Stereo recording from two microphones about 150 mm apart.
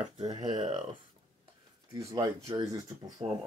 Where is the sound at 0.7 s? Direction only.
45° right (ahead or behind).